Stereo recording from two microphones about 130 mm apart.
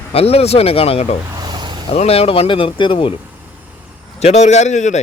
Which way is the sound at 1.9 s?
50° left (ahead or behind).